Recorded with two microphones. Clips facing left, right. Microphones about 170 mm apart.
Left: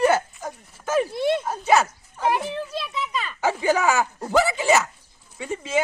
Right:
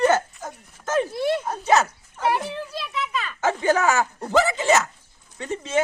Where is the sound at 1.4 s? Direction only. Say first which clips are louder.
Even; 5° left (ahead or behind).